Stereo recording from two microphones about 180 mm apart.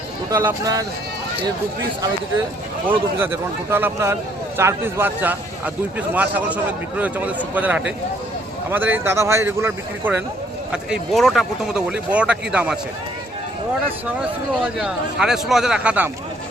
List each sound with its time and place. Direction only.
0.3 s speech: 20° right (ahead or behind)
3.2 s a man's voice: 10° right (ahead or behind)
14.2 s speech: 5° right (ahead or behind)